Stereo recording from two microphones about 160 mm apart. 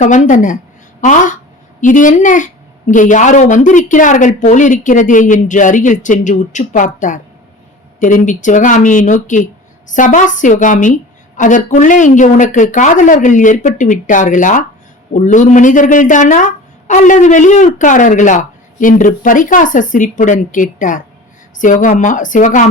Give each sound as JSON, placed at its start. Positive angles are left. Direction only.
{"t": 0.0, "sound": "speech", "side_deg": 50}